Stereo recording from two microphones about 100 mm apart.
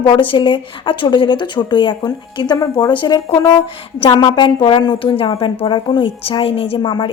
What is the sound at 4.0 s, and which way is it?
A woman's voice, 50° left (ahead or behind).